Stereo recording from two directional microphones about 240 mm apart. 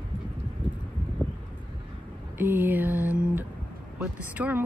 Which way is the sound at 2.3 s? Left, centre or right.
Centre.